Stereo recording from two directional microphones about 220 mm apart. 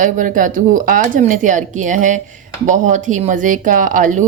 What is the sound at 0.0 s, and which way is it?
Speech, 35° right (ahead or behind).